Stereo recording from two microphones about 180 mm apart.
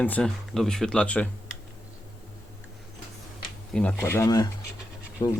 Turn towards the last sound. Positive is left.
turn(degrees=25)  # may be behind; listen again after turning